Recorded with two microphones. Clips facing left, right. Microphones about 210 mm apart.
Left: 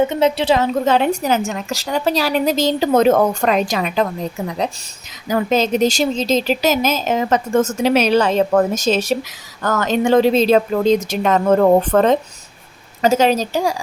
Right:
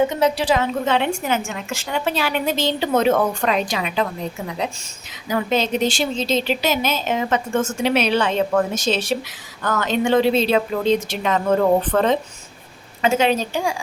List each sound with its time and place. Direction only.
0.1 s a woman's voice: 25° left (ahead or behind)
0.6 s a woman's voice: 40° left (ahead or behind)